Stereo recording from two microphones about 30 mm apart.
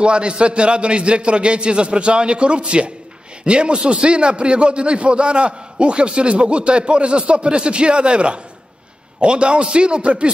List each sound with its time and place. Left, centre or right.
0.0 s a man's voice: right